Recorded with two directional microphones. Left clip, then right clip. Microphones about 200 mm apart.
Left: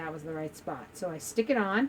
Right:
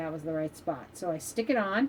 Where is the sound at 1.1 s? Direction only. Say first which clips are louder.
Left 2 dB; 30° left (ahead or behind).